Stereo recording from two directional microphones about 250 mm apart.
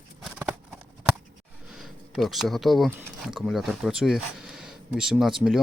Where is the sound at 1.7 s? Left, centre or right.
Centre.